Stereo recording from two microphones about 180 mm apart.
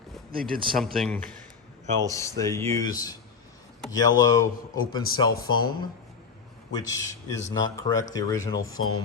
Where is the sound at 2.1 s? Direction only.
15° left (ahead or behind).